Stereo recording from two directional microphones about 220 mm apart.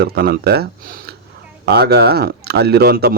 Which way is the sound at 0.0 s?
45° right (ahead or behind).